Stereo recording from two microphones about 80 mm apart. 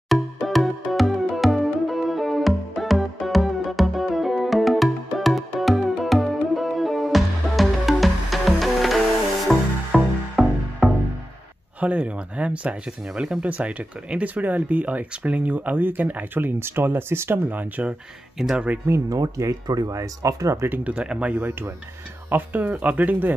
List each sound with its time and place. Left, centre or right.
0.1 s music: centre
11.8 s speech: centre
18.4 s speech: centre
19.0 s speech: right
19.6 s speech: right
20.7 s speech: centre